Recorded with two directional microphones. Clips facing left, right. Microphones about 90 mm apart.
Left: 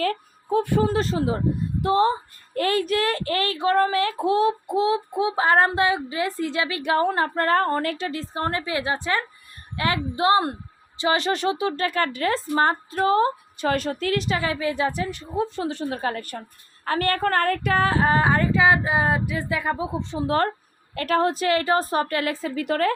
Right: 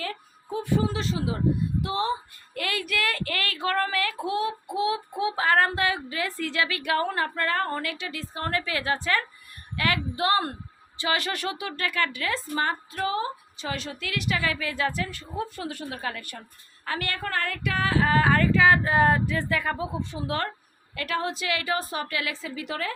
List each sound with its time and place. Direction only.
0.0 s a woman's voice: 55° left (ahead or behind)